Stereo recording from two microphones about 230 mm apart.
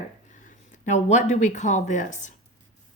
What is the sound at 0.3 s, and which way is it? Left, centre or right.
Speech, left.